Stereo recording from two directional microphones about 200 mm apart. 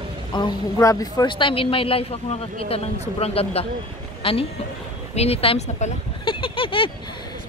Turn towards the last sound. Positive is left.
turn(degrees=25)  # may be behind; listen again after turning